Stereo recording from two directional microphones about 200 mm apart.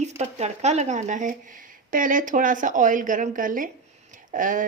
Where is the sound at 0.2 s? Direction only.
35° right (ahead or behind).